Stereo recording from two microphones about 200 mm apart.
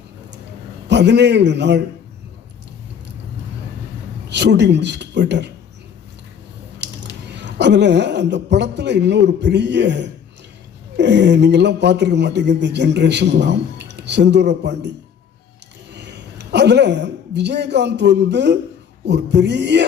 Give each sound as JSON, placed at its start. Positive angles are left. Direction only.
{"t": 0.9, "sound": "speech", "side_deg": -60}
{"t": 4.3, "sound": "speech", "side_deg": -60}
{"t": 6.7, "sound": "speech", "side_deg": -60}
{"t": 16.0, "sound": "a woman's voice", "side_deg": -60}